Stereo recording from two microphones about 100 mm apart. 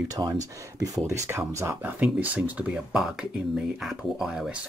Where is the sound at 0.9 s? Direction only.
35° right (ahead or behind).